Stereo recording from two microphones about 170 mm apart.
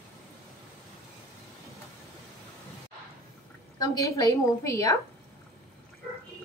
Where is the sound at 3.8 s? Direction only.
20° left (ahead or behind).